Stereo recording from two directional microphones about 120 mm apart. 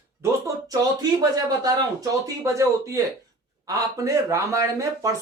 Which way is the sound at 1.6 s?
35° right (ahead or behind).